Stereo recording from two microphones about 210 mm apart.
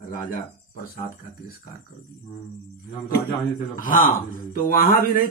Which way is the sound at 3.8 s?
40° left (ahead or behind).